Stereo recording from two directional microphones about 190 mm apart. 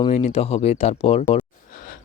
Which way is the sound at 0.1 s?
35° left (ahead or behind).